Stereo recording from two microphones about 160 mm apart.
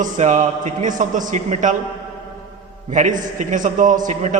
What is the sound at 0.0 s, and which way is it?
A man's voice, 50° right (ahead or behind).